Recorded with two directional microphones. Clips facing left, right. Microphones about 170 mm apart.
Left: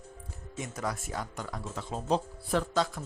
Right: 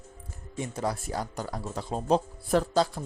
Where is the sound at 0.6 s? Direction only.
30° right (ahead or behind).